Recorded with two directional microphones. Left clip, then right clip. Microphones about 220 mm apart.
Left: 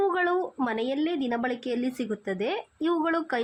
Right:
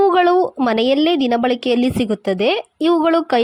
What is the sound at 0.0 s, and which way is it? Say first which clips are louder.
A woman's voice: right 12 dB; 30° right (ahead or behind).